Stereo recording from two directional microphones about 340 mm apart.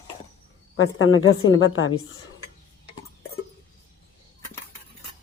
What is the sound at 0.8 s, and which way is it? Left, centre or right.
A woman's voice, left.